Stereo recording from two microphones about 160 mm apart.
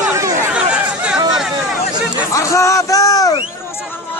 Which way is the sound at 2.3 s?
20° left (ahead or behind).